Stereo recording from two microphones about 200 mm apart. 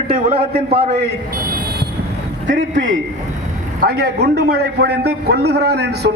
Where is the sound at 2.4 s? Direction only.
40° right (ahead or behind).